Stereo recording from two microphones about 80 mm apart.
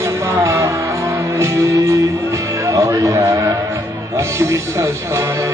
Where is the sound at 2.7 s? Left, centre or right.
Right.